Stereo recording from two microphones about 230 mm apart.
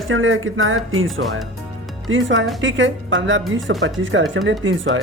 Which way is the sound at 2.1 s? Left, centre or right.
Right.